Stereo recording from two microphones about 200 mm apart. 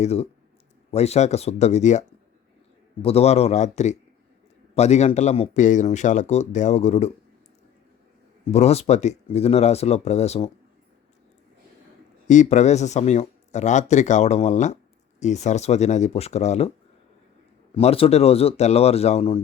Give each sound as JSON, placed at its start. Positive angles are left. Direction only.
{"t": 0.0, "sound": "speech", "side_deg": 30}
{"t": 8.4, "sound": "speech", "side_deg": 30}
{"t": 12.3, "sound": "speech", "side_deg": 35}
{"t": 17.7, "sound": "speech", "side_deg": 30}